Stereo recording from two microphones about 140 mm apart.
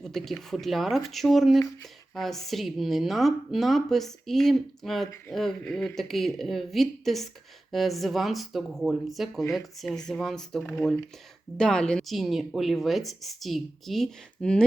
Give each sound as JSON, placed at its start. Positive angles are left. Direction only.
{"t": 0.0, "sound": "a woman's voice", "side_deg": 0}